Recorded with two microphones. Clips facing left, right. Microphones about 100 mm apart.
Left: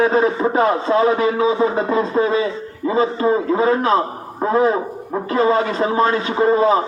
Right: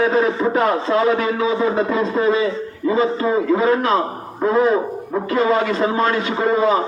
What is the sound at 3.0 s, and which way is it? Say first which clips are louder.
Speech: left 2 dB; 30° left (ahead or behind).